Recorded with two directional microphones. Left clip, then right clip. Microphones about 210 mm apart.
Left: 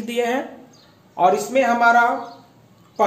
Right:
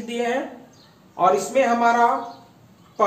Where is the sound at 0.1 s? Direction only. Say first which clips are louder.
Left 2 dB; 55° left (ahead or behind).